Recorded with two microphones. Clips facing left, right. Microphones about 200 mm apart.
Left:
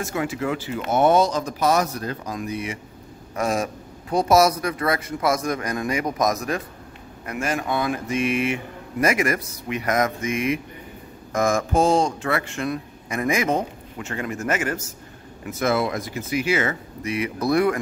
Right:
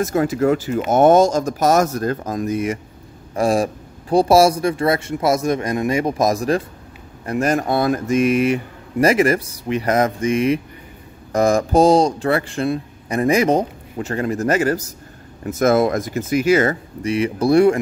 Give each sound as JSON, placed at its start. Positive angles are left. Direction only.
{"t": 0.0, "sound": "speech", "side_deg": -40}
{"t": 3.3, "sound": "a man's voice", "side_deg": -30}